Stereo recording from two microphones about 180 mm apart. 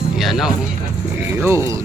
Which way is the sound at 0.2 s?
Centre (ahead or behind).